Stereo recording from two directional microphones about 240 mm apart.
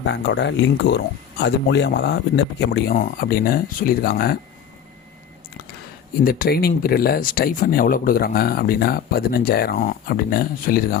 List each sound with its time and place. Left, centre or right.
0.0 s speech: left
6.2 s speech: left